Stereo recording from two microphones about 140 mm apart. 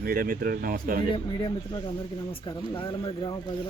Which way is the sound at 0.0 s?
90° right.